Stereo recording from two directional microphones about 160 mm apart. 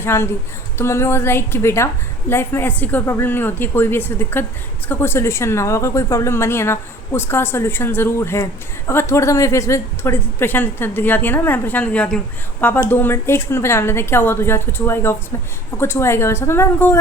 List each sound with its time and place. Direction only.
0.0 s a woman's voice: 15° left (ahead or behind)